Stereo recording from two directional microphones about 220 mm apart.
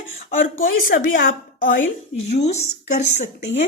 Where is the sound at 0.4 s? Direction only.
40° left (ahead or behind).